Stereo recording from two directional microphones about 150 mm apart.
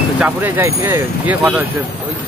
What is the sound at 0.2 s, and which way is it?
Speech, 15° right (ahead or behind).